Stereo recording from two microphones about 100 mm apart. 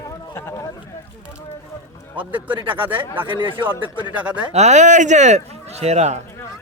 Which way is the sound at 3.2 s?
55° right (ahead or behind).